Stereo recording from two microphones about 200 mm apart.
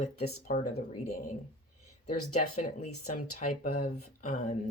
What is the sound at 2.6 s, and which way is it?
Speech, 35° left (ahead or behind).